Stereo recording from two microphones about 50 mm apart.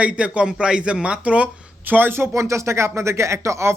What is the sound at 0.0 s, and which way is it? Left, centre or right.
Speech, right.